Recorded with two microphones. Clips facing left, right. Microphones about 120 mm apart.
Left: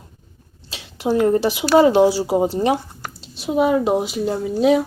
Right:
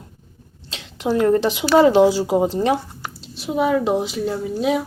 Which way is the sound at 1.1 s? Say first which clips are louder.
Even; 20° left (ahead or behind).